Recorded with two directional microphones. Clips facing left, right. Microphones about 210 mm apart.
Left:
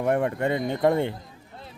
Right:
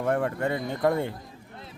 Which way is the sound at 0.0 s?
20° left (ahead or behind).